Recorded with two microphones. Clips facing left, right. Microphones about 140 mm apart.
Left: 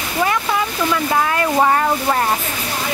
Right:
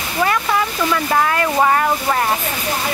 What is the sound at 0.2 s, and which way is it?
Speech, 15° left (ahead or behind).